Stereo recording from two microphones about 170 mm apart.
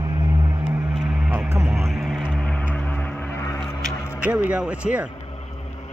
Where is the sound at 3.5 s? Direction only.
Centre (ahead or behind).